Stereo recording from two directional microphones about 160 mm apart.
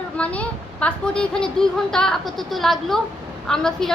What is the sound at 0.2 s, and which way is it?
A woman's voice, 10° left (ahead or behind).